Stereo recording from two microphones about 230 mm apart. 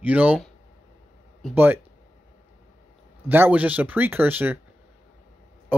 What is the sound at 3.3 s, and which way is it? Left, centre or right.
Speech, centre.